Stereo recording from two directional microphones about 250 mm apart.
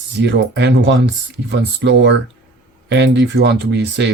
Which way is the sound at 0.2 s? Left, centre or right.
Right.